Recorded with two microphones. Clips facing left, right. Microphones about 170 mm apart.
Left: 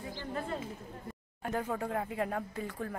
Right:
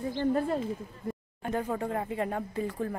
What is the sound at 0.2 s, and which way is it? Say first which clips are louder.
Speech: right 12 dB; 45° right (ahead or behind).